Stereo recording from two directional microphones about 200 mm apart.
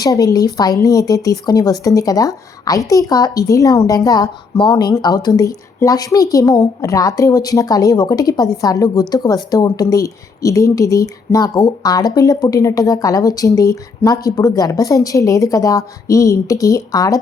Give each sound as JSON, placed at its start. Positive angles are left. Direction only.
{"t": 0.0, "sound": "speech", "side_deg": 20}